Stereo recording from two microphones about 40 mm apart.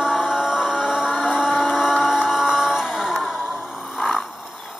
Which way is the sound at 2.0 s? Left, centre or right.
Centre.